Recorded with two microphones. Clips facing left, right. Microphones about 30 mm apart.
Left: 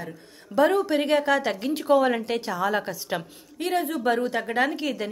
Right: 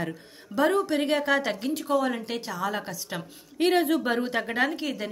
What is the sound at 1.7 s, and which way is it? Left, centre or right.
Speech, left.